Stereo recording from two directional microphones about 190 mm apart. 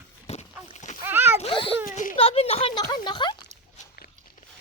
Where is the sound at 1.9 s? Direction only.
45° left (ahead or behind).